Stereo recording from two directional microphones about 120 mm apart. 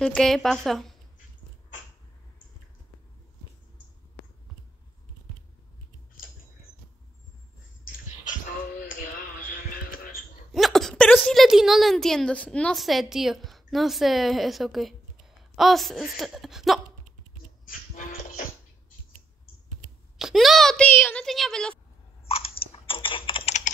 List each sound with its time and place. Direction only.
0.0 s a woman's voice: 5° left (ahead or behind)
8.2 s music: 90° left
10.5 s a sound: centre (ahead or behind)
11.3 s a woman's voice: 5° right (ahead or behind)
17.9 s music: 90° left
20.2 s a woman's voice: centre (ahead or behind)
22.7 s typing: 50° left (ahead or behind)